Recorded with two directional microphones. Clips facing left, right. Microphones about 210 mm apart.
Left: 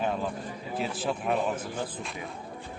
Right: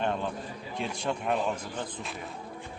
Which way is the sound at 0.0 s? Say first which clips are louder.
Left 1 dB; 5° left (ahead or behind).